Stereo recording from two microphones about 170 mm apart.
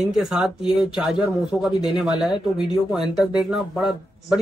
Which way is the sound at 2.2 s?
30° left (ahead or behind).